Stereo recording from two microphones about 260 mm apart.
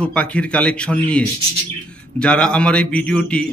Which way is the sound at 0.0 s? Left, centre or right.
Centre.